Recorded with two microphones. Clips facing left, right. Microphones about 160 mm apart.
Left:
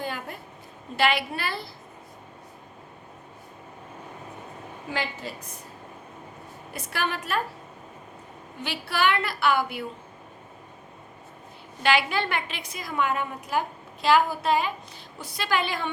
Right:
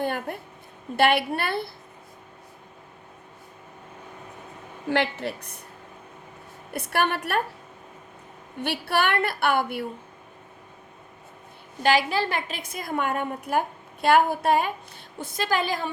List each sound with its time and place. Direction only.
0.0 s a woman's voice: 55° right (ahead or behind)
4.9 s a woman's voice: 65° right (ahead or behind)
6.7 s a woman's voice: 60° right (ahead or behind)
8.6 s a woman's voice: 55° right (ahead or behind)
11.8 s a woman's voice: 40° right (ahead or behind)